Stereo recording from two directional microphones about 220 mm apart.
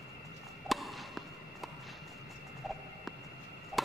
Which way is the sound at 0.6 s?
Centre (ahead or behind).